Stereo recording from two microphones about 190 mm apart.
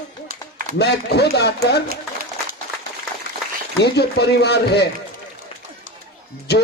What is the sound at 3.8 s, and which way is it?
Speech, 60° left (ahead or behind).